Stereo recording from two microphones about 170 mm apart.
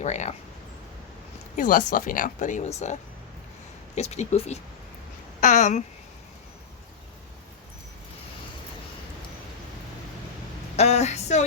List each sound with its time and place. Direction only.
0.0 s speech: 45° left (ahead or behind)
1.5 s speech: 55° left (ahead or behind)
3.9 s speech: 40° left (ahead or behind)
10.8 s speech: 40° left (ahead or behind)